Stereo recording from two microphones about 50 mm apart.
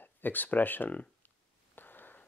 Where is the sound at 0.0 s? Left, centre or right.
Left.